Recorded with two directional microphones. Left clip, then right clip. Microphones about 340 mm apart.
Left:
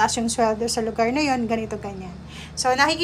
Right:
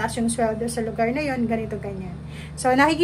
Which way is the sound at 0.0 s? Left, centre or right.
Centre.